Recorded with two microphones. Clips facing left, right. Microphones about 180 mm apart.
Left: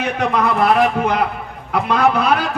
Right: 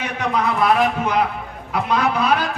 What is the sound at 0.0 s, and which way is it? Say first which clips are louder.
A man's voice: left 3 dB; 60° left (ahead or behind).